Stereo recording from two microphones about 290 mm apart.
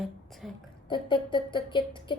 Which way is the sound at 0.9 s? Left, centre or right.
Centre.